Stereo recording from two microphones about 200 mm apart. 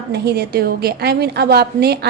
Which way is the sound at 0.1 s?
55° right (ahead or behind).